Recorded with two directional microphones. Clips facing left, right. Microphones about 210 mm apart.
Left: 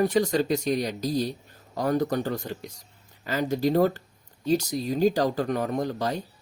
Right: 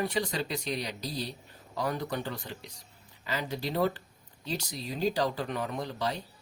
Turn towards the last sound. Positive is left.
turn(degrees=45)  # may be behind; listen again after turning